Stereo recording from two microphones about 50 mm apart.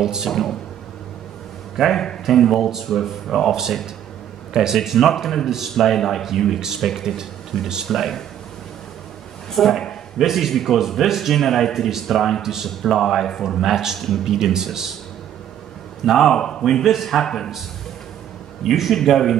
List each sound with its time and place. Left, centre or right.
0.0 s speech: centre
0.3 s a man's voice: centre
1.8 s a man's voice: centre
4.7 s a man's voice: centre
9.5 s a man's voice: centre
13.9 s a man's voice: centre
14.2 s speech: centre
16.1 s a man's voice: centre
16.8 s a man's voice: centre
18.6 s a man's voice: centre